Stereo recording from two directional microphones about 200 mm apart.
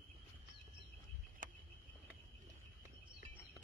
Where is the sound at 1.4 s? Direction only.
40° right (ahead or behind).